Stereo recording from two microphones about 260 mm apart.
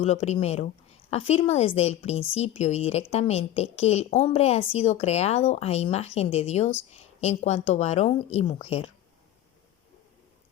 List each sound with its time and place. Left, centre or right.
0.0 s a woman's voice: left